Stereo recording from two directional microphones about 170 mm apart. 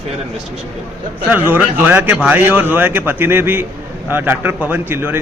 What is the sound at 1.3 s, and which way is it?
A man's voice, 10° right (ahead or behind).